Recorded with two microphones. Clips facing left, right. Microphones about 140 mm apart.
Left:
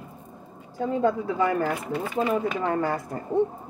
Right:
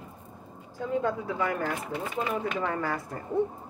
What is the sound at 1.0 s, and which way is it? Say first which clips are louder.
Speech: left 8 dB; 35° left (ahead or behind).